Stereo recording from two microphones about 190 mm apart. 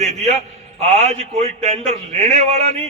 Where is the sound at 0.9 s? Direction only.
35° right (ahead or behind).